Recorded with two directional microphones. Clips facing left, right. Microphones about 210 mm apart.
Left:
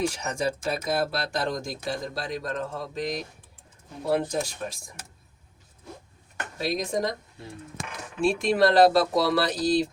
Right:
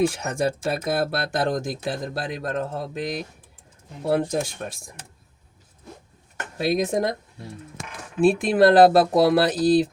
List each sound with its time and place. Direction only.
0.1 s speech: 55° right (ahead or behind)
6.6 s speech: 55° right (ahead or behind)
8.2 s speech: 55° right (ahead or behind)